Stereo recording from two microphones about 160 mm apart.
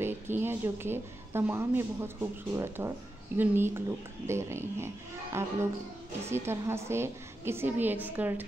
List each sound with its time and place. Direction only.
0.0 s a woman's voice: 15° right (ahead or behind)